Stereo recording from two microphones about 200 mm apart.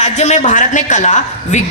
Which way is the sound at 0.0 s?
35° left (ahead or behind).